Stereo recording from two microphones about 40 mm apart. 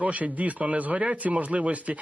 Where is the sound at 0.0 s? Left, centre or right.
Right.